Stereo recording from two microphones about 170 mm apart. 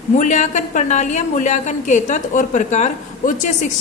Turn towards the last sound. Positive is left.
turn(degrees=45)  # may be behind; listen again after turning